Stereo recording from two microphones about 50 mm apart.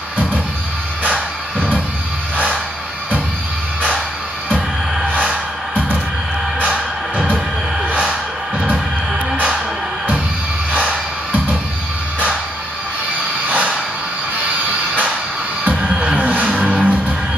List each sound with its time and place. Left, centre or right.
1.0 s music: left
2.3 s music: right
5.1 s music: right
10.7 s music: right
15.7 s music: centre